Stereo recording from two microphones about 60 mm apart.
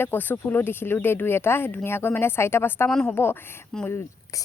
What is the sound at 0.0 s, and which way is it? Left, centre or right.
Speech, left.